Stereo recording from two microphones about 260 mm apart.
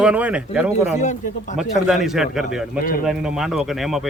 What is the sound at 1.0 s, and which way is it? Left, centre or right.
Speech, left.